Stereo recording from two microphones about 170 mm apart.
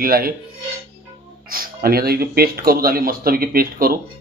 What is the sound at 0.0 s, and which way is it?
Speech, 60° right (ahead or behind).